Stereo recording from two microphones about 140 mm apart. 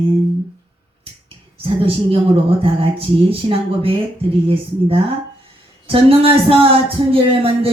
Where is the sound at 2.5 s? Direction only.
40° right (ahead or behind).